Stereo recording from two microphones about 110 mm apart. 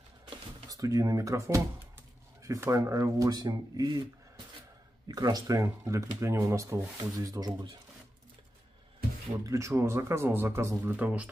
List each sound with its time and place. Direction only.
0.7 s speech: 30° right (ahead or behind)
5.0 s speech: 35° right (ahead or behind)
9.5 s speech: 25° right (ahead or behind)